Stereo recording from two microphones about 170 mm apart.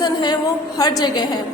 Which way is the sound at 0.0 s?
25° left (ahead or behind).